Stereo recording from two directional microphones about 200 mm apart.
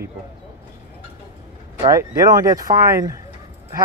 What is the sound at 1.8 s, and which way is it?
Speech, 15° right (ahead or behind).